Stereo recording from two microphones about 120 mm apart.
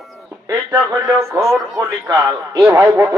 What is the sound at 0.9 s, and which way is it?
Music, 25° right (ahead or behind).